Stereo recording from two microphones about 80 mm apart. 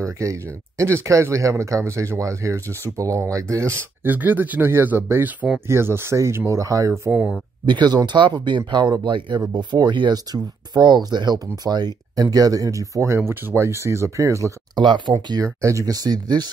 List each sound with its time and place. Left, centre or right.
0.0 s speech: right
4.0 s speech: right
5.7 s speech: right
7.6 s speech: right
9.4 s speech: right
14.8 s speech: right
15.2 s speech: right